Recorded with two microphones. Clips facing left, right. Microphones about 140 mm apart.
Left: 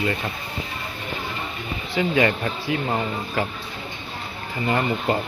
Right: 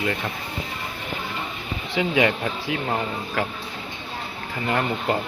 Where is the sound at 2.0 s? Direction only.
5° right (ahead or behind).